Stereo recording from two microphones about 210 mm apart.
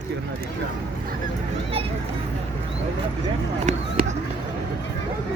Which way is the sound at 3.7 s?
35° right (ahead or behind).